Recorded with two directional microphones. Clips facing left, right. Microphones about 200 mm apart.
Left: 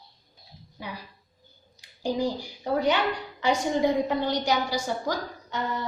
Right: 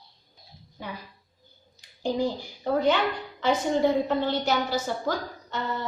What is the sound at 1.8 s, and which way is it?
A woman's voice, 10° left (ahead or behind).